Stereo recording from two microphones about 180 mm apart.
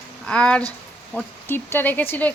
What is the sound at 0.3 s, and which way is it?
Speech, 5° left (ahead or behind).